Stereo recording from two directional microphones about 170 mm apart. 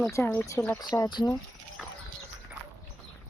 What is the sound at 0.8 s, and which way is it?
Speech, 25° left (ahead or behind).